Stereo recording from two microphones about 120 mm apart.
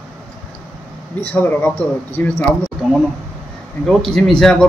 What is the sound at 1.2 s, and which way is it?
Speech, 15° left (ahead or behind).